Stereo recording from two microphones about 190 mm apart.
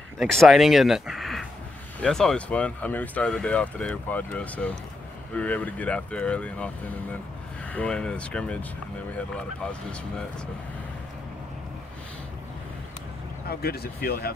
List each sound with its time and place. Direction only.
0.2 s speech: centre (ahead or behind)
13.5 s speech: 55° left (ahead or behind)